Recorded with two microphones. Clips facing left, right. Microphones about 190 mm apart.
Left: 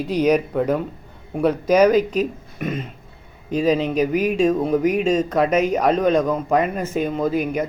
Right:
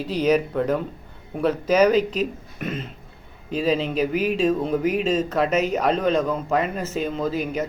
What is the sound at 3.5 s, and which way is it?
Speech, 45° left (ahead or behind).